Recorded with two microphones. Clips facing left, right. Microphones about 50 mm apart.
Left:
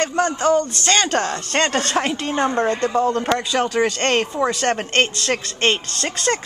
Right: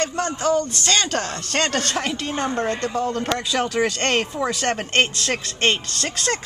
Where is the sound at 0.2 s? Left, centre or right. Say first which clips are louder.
Left 5 dB; left.